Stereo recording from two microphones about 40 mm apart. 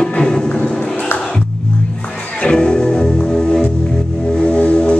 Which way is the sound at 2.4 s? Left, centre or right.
Left.